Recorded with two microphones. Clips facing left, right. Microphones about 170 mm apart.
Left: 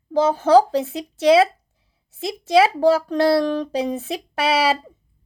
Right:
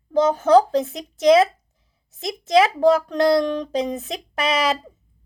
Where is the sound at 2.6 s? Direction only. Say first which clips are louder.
Even; 5° left (ahead or behind).